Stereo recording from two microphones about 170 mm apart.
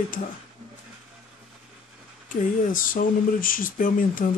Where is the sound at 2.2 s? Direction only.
50° left (ahead or behind).